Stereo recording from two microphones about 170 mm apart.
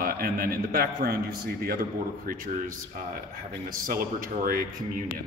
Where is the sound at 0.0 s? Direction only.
60° right (ahead or behind).